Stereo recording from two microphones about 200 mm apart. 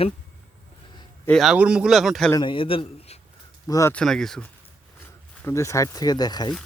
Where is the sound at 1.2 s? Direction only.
Centre (ahead or behind).